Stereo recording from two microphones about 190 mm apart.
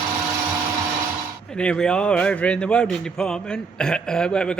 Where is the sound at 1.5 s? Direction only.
5° left (ahead or behind).